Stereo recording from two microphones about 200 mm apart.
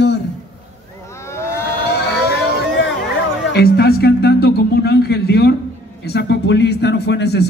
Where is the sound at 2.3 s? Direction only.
65° left (ahead or behind).